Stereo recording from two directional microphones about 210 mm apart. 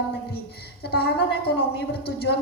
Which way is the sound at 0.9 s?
50° left (ahead or behind).